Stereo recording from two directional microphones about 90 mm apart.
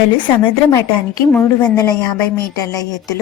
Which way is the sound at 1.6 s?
45° left (ahead or behind).